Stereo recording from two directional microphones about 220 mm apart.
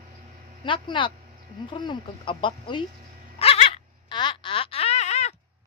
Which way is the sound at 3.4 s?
25° left (ahead or behind).